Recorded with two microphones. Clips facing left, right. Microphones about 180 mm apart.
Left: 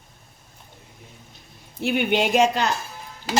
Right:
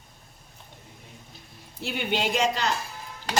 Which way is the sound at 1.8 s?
60° left (ahead or behind).